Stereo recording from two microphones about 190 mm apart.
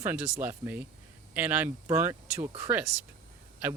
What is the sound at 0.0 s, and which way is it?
Speech, 10° right (ahead or behind).